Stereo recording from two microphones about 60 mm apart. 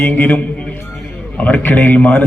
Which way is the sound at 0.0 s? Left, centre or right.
Left.